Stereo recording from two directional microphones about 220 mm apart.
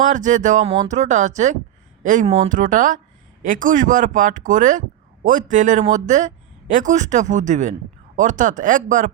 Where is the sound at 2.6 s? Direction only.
35° right (ahead or behind).